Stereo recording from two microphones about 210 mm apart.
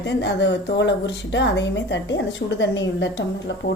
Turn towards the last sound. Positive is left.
turn(degrees=60)  # may be behind; listen again after turning